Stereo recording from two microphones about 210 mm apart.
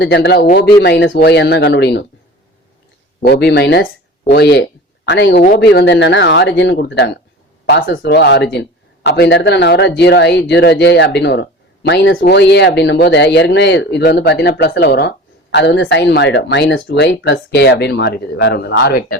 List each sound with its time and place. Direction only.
0.0 s speech: 55° left (ahead or behind)
3.2 s speech: 55° left (ahead or behind)
12.1 s speech: 50° left (ahead or behind)